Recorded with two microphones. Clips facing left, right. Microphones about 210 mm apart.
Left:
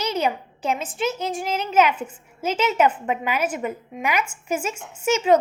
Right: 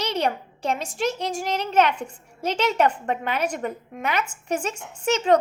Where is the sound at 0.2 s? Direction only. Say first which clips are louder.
Left 1 dB; 5° left (ahead or behind).